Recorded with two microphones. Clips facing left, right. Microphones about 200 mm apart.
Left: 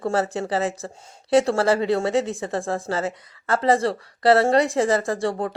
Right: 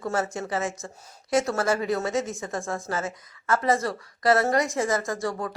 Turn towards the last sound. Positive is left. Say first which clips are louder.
# left 5 dB
turn(degrees=30)  # may be behind; listen again after turning